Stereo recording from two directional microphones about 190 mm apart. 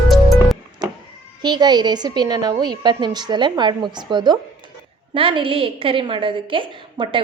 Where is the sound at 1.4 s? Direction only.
20° right (ahead or behind).